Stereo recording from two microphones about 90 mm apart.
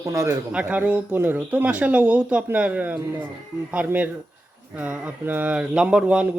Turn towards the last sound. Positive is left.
turn(degrees=-10)  # may be behind; listen again after turning